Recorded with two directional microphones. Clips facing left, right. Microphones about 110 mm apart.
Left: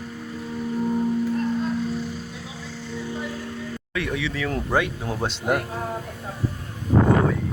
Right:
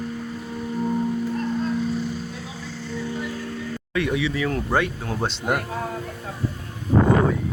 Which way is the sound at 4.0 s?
5° right (ahead or behind).